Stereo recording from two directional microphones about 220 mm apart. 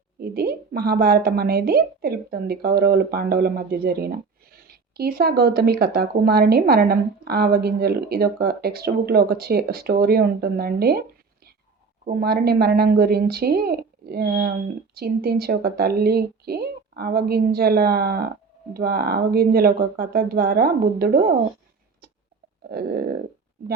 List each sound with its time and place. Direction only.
0.2 s a woman's voice: 45° right (ahead or behind)
12.0 s a woman's voice: 45° right (ahead or behind)
22.7 s a woman's voice: 45° right (ahead or behind)